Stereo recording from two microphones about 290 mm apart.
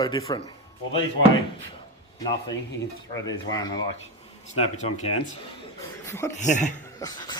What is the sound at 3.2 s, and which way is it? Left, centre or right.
Speech, centre.